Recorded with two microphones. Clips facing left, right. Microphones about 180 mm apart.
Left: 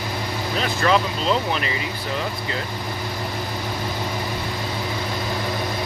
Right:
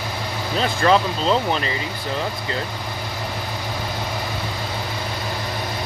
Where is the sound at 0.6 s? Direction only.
35° right (ahead or behind).